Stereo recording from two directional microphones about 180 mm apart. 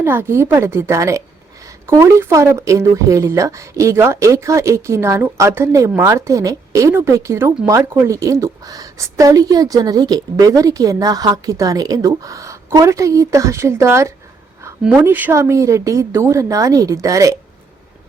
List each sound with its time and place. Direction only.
0.0 s a woman's voice: 15° right (ahead or behind)